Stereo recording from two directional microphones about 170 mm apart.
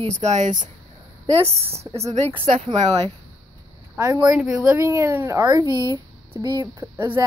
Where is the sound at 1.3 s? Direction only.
35° right (ahead or behind).